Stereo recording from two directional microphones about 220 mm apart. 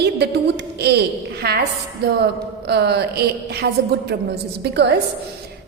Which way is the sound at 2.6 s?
50° right (ahead or behind).